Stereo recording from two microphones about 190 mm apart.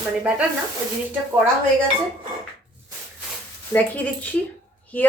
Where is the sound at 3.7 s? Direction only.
10° left (ahead or behind).